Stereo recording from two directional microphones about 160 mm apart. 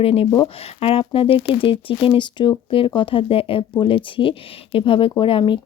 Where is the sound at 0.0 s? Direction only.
35° left (ahead or behind).